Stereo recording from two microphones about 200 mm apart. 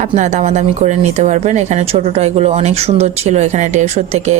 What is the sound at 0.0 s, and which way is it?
Speech, 35° right (ahead or behind).